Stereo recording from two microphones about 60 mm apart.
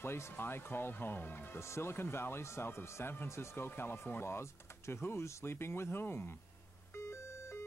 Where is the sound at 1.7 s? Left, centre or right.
Left.